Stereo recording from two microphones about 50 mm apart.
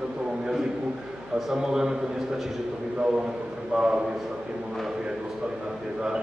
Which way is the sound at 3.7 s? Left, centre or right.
Centre.